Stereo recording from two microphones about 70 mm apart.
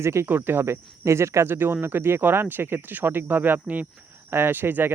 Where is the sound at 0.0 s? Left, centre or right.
Right.